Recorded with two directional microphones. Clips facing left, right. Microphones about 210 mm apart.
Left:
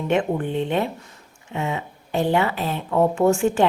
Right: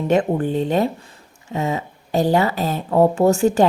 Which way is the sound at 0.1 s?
35° right (ahead or behind).